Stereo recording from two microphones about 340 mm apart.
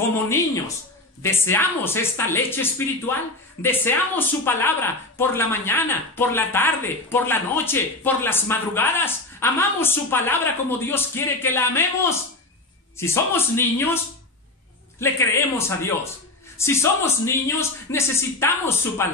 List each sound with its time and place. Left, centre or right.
1.2 s speech: centre
15.0 s speech: centre